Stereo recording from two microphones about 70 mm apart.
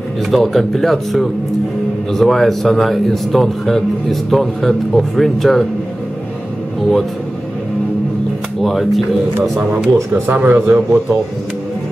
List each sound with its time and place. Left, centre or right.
0.3 s speech: centre
8.6 s speech: centre
10.2 s speech: right